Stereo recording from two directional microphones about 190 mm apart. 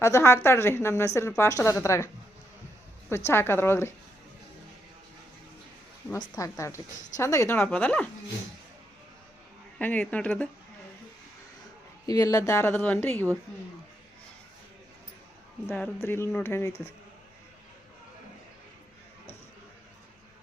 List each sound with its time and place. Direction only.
0.0 s a woman's voice: 15° left (ahead or behind)
3.2 s a woman's voice: 10° left (ahead or behind)
6.1 s a woman's voice: 15° left (ahead or behind)
9.7 s a woman's voice: 10° left (ahead or behind)
12.0 s a woman's voice: 20° left (ahead or behind)
15.6 s a woman's voice: 10° left (ahead or behind)